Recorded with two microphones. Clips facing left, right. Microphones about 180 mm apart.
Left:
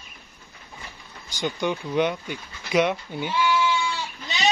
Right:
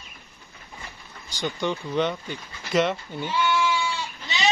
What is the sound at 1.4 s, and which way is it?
Speech, centre (ahead or behind).